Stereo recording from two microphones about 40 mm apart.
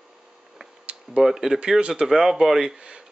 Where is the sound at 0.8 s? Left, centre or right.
Right.